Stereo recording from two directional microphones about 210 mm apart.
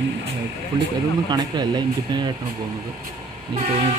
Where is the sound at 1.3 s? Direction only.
20° right (ahead or behind).